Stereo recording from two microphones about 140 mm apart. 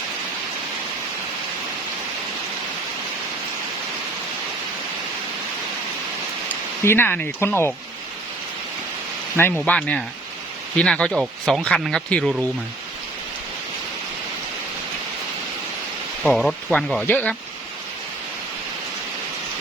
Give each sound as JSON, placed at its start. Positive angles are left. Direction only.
{"t": 6.8, "sound": "speech", "side_deg": 15}
{"t": 9.6, "sound": "speech", "side_deg": 10}
{"t": 16.2, "sound": "speech", "side_deg": 0}